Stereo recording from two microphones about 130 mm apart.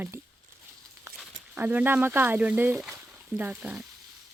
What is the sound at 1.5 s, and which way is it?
Speech, 15° right (ahead or behind).